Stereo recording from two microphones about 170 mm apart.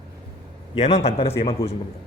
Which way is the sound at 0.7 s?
40° left (ahead or behind).